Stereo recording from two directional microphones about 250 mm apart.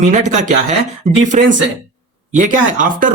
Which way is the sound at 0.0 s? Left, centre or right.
Right.